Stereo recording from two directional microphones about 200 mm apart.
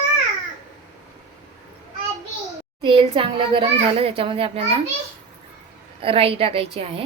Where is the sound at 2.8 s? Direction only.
25° right (ahead or behind).